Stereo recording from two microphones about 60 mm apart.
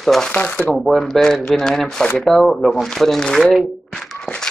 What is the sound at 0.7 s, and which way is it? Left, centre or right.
Speech, centre.